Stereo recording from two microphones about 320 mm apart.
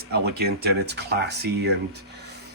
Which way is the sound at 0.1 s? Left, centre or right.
Right.